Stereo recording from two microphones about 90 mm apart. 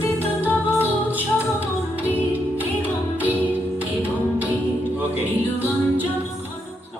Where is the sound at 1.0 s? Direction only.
20° right (ahead or behind).